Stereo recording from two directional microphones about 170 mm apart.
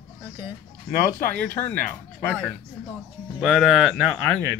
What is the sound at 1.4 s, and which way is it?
Speech, 10° left (ahead or behind).